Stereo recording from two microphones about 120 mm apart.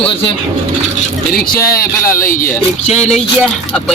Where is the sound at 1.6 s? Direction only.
25° left (ahead or behind).